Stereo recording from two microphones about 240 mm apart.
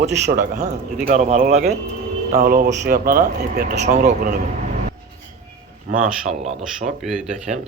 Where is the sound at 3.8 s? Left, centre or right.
Right.